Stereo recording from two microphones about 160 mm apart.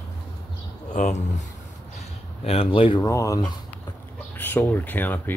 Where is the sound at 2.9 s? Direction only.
20° left (ahead or behind).